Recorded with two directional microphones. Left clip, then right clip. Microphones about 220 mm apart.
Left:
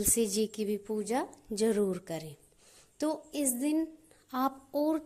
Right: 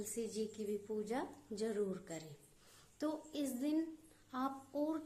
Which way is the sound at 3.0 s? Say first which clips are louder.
Left 9 dB; 35° left (ahead or behind).